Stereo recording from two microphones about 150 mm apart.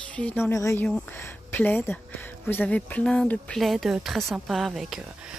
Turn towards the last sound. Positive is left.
turn(degrees=0)  # may be behind; listen again after turning